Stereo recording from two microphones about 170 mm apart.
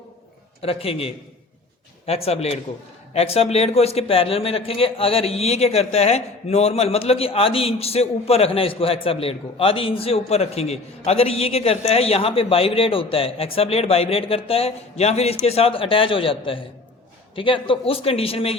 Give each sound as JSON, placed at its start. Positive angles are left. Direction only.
{"t": 0.6, "sound": "speech", "side_deg": 35}